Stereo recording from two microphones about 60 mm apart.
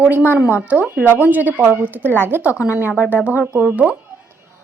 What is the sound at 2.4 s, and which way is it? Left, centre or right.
Speech, right.